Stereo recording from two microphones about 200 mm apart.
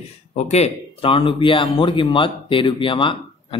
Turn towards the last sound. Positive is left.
turn(degrees=25)  # may be behind; listen again after turning